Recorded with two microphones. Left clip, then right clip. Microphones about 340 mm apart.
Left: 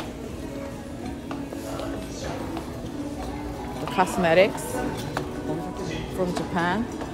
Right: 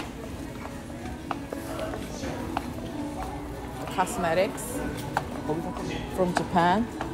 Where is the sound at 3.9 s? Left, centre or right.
Left.